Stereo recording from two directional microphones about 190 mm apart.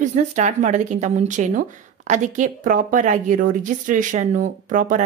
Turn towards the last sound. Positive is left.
turn(degrees=-45)  # may be behind; listen again after turning